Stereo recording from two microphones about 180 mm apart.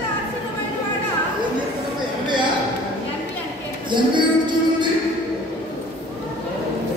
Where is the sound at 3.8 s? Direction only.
25° right (ahead or behind).